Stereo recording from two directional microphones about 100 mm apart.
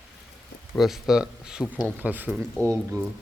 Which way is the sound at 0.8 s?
5° right (ahead or behind).